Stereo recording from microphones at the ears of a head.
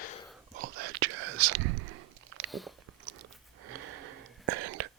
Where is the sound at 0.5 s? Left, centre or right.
Right.